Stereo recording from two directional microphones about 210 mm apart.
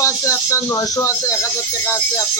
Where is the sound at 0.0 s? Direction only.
15° left (ahead or behind).